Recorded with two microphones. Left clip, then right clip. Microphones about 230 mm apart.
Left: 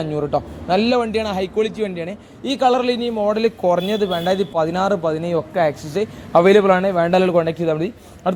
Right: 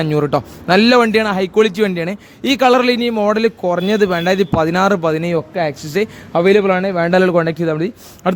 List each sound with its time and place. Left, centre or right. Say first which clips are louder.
0.0 s a man's voice: right 5 dB; right
6.3 s a man's voice: even; right